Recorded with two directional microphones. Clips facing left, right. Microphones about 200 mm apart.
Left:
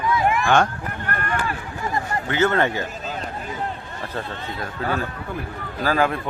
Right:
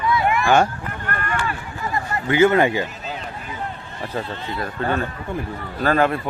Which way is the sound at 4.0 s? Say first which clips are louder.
Right 4 dB; 10° right (ahead or behind).